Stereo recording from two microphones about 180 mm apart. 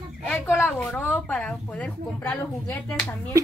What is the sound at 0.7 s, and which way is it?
Speech, 10° left (ahead or behind).